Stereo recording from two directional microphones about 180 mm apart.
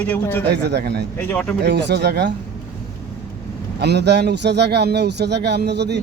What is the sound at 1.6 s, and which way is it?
Speech, 65° right (ahead or behind).